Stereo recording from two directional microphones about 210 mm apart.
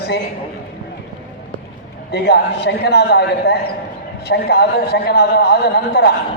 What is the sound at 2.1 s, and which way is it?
A man's voice, 55° left (ahead or behind).